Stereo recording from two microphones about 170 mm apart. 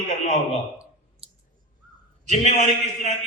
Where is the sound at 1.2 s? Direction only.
35° right (ahead or behind).